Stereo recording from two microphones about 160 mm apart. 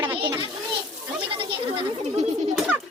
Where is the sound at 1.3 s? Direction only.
30° right (ahead or behind).